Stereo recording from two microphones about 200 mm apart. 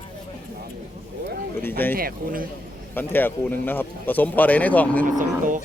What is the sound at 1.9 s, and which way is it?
Speech, 45° right (ahead or behind).